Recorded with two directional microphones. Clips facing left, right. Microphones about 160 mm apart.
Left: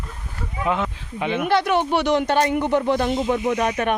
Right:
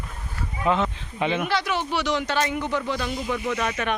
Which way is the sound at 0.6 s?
10° left (ahead or behind).